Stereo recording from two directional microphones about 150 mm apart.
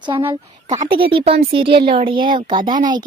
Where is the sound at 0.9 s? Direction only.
35° right (ahead or behind).